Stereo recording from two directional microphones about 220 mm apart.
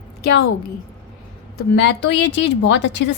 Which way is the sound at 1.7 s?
55° left (ahead or behind).